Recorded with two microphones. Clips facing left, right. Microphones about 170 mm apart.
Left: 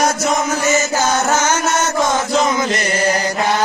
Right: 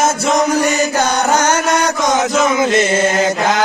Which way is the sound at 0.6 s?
65° right (ahead or behind).